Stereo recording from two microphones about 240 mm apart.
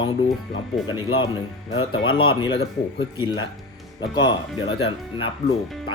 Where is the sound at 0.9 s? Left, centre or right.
Centre.